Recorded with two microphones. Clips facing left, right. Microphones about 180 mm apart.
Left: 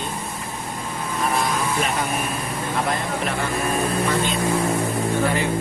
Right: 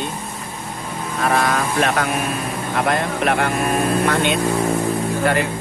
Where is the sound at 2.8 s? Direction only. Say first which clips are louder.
Right 5 dB; 65° right (ahead or behind).